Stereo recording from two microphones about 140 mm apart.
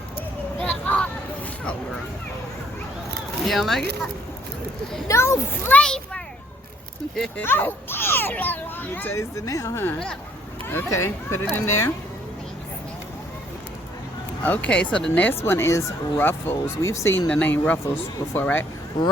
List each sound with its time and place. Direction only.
0.6 s a sound: 10° left (ahead or behind)
3.4 s speech: centre (ahead or behind)
5.0 s speech: 20° left (ahead or behind)
9.3 s speech: 25° left (ahead or behind)
14.4 s speech: 10° left (ahead or behind)
17.2 s speech: 10° left (ahead or behind)